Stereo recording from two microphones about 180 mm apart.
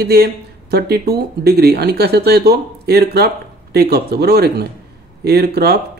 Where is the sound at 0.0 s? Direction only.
60° right (ahead or behind).